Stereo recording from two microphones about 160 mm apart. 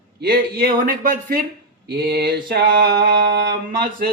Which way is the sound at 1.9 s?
80° right.